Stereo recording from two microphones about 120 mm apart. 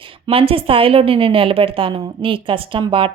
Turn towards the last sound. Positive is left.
turn(degrees=-45)  # may be behind; listen again after turning